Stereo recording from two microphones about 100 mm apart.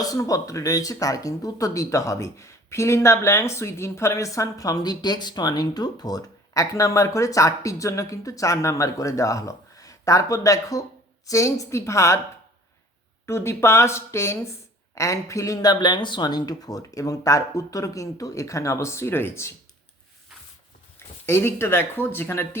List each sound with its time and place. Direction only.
0.0 s speech: 35° left (ahead or behind)
13.2 s speech: 25° left (ahead or behind)
21.2 s speech: 25° left (ahead or behind)